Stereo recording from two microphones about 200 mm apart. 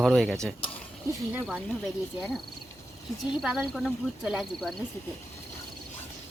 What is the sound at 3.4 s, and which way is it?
Speech, centre (ahead or behind).